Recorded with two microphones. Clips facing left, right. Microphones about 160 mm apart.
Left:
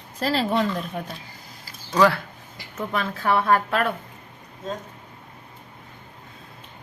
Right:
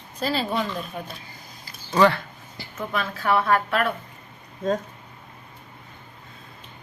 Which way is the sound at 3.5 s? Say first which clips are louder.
Left 1 dB; 35° left (ahead or behind).